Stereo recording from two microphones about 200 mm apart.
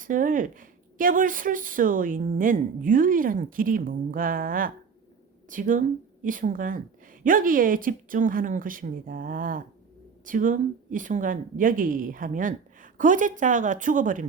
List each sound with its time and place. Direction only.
0.0 s speech: 40° right (ahead or behind)